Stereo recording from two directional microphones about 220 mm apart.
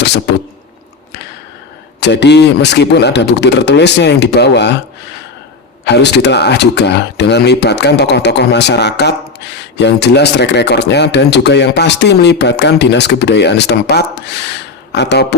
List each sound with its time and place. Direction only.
2.0 s speech: 50° left (ahead or behind)
5.8 s speech: 50° left (ahead or behind)